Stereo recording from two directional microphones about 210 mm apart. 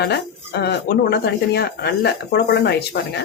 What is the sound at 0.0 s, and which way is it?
Speech, 50° left (ahead or behind).